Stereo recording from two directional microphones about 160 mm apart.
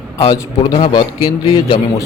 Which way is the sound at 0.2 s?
25° left (ahead or behind).